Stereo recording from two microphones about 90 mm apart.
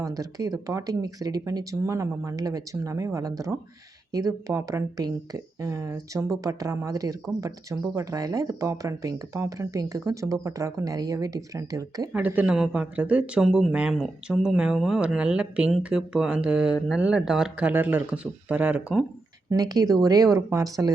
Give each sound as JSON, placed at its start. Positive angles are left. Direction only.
{"t": 0.0, "sound": "speech", "side_deg": -40}
{"t": 12.1, "sound": "speech", "side_deg": -15}
{"t": 17.6, "sound": "speech", "side_deg": -20}
{"t": 19.5, "sound": "speech", "side_deg": -40}